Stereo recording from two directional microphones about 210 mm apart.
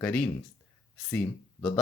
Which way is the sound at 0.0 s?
5° left (ahead or behind).